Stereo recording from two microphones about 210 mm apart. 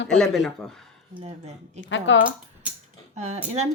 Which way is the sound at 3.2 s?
30° right (ahead or behind).